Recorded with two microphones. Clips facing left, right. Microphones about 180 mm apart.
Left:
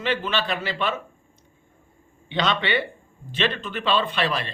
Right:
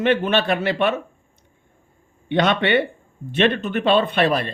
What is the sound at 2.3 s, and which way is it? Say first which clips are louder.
A man's voice: right 6 dB; 60° right (ahead or behind).